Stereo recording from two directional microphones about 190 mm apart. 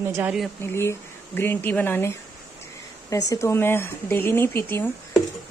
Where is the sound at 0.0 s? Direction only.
10° right (ahead or behind).